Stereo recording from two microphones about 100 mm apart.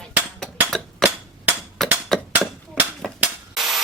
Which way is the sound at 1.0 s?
5° left (ahead or behind).